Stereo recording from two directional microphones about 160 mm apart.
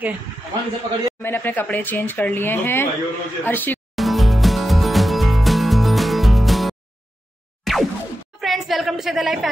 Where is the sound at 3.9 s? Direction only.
Centre (ahead or behind).